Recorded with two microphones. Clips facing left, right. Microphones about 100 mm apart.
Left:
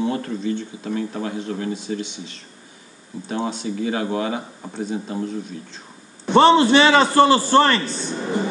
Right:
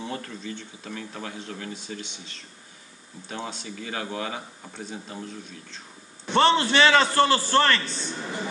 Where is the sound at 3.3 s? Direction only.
15° left (ahead or behind).